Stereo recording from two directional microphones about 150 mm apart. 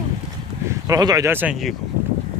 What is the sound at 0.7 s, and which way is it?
Speech, 20° right (ahead or behind).